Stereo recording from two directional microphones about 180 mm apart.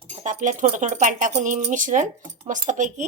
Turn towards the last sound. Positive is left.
turn(degrees=-45)  # may be behind; listen again after turning